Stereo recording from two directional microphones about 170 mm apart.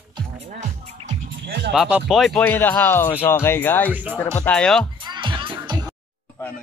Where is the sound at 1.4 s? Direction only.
85° right.